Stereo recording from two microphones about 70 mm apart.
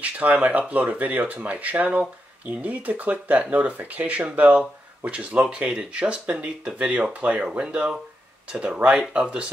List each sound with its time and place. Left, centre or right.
0.0 s speech: right